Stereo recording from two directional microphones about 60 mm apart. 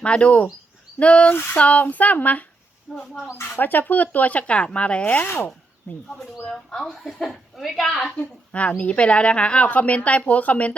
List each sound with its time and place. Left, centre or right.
0.0 s speech: centre
2.9 s speech: centre
3.6 s speech: left
5.0 s speech: left
6.1 s speech: centre
8.1 s speech: left